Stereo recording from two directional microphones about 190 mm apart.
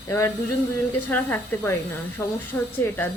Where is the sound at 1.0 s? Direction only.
10° left (ahead or behind).